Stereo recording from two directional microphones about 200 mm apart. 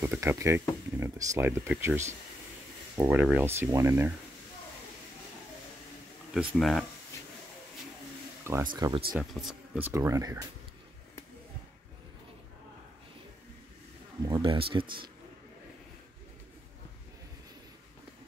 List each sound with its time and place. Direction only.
0.0 s speech: 10° right (ahead or behind)
6.5 s speech: centre (ahead or behind)
8.7 s speech: 20° right (ahead or behind)
9.1 s speech: centre (ahead or behind)
14.2 s speech: 25° right (ahead or behind)